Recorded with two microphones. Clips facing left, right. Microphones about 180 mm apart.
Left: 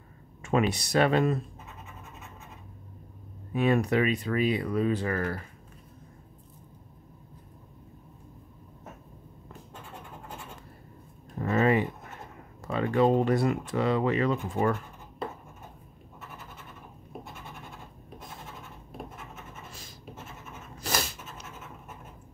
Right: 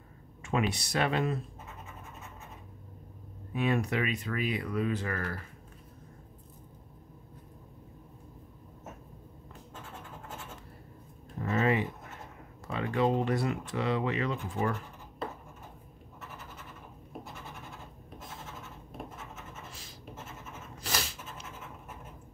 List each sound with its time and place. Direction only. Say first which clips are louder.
0.4 s speech: left 5 dB; 45° left (ahead or behind)
3.5 s speech: left 5 dB; 45° left (ahead or behind)
11.5 s speech: left 4 dB; 45° left (ahead or behind)
20.8 s pant: left 4 dB; 45° left (ahead or behind)